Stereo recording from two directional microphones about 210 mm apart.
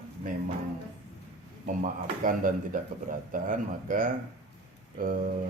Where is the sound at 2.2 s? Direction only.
40° right (ahead or behind).